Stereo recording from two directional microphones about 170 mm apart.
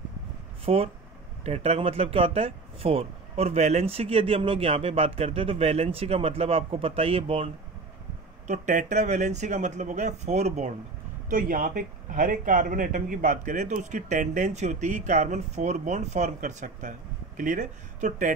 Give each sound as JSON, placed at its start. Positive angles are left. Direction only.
{"t": 0.7, "sound": "speech", "side_deg": -40}
{"t": 8.5, "sound": "speech", "side_deg": -45}
{"t": 11.2, "sound": "speech", "side_deg": -55}